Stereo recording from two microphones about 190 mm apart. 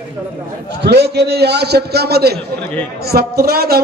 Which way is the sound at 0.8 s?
60° right (ahead or behind).